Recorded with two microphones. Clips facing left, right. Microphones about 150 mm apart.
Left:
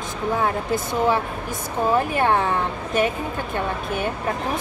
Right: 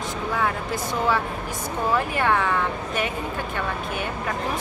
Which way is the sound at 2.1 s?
30° left (ahead or behind).